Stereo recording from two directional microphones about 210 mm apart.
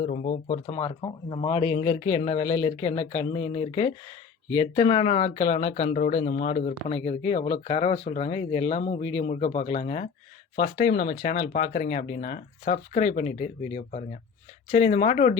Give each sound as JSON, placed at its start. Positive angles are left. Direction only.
{"t": 0.0, "sound": "speech", "side_deg": 40}
{"t": 0.8, "sound": "speech", "side_deg": 20}